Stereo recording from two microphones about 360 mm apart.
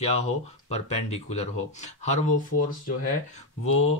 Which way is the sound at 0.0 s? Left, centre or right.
Centre.